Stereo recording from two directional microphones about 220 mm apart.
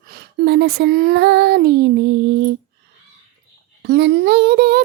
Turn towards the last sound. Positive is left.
turn(degrees=-45)  # may be behind; listen again after turning